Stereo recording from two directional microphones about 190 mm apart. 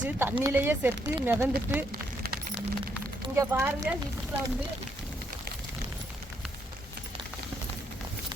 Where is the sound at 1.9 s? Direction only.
50° right (ahead or behind).